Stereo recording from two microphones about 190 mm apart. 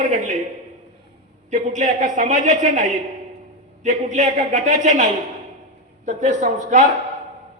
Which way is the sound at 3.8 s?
40° right (ahead or behind).